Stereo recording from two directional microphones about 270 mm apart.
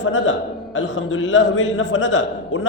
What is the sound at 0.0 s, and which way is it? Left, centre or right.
A man's voice, left.